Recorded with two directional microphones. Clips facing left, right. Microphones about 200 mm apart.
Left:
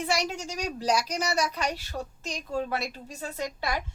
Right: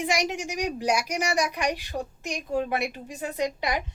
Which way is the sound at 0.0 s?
15° right (ahead or behind).